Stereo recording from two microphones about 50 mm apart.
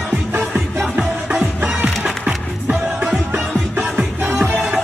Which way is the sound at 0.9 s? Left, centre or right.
Centre.